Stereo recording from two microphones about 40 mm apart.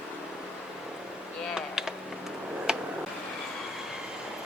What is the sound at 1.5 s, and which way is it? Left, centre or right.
Typing, centre.